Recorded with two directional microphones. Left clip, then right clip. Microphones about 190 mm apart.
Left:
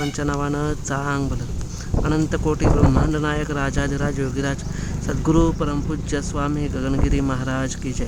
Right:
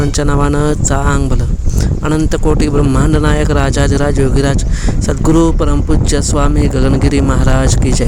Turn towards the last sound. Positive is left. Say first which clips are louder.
# right 11 dB
turn(degrees=-35)  # may be behind; listen again after turning